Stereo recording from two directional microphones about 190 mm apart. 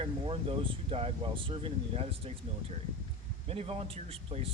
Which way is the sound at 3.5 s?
30° right (ahead or behind).